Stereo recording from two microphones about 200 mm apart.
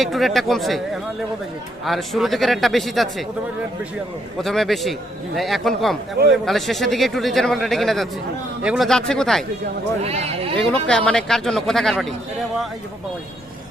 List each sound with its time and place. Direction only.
0.0 s a man's voice: centre (ahead or behind)
1.8 s a man's voice: centre (ahead or behind)
4.4 s a man's voice: centre (ahead or behind)
10.0 s speech: 30° right (ahead or behind)
10.6 s a man's voice: 5° left (ahead or behind)